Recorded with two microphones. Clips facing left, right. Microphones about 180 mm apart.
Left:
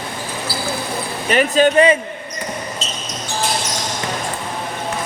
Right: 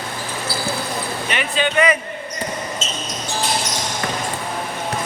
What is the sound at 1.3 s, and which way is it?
Speech, 40° left (ahead or behind).